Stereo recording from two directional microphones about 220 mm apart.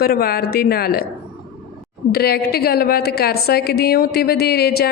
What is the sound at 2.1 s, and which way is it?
Speech, 45° left (ahead or behind).